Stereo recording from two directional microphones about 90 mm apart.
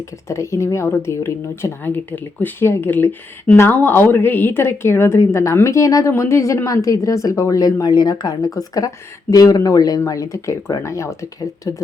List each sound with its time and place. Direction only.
0.3 s a woman's voice: 30° left (ahead or behind)